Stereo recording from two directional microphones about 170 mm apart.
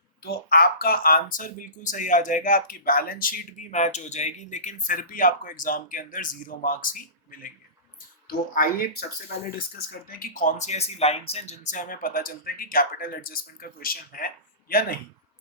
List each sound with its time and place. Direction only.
0.3 s speech: 65° left (ahead or behind)
10.1 s speech: 55° left (ahead or behind)